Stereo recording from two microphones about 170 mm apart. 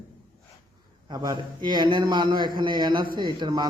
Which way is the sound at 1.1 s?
25° right (ahead or behind).